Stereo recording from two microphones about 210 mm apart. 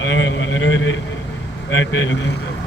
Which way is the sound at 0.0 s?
60° left (ahead or behind).